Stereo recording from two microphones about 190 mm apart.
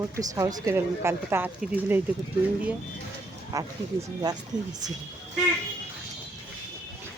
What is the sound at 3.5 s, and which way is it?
Speech, 20° right (ahead or behind).